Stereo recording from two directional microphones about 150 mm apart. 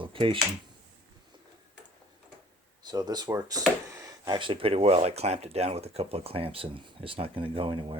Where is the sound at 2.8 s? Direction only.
25° right (ahead or behind).